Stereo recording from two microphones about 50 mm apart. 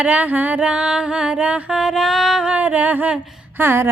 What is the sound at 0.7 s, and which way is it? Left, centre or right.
Music, centre.